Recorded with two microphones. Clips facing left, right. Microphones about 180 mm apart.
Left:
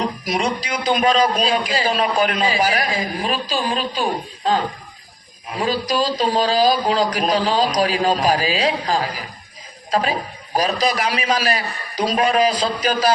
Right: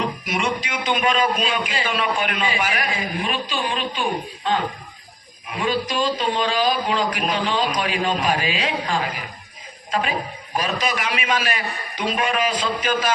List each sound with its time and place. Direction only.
0.0 s a man's voice: 35° left (ahead or behind)